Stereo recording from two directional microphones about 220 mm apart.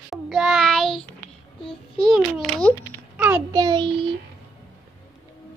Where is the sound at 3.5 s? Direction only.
20° right (ahead or behind).